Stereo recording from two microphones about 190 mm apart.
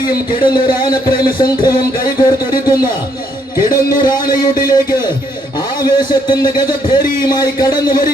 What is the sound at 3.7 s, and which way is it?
Speech, 50° left (ahead or behind).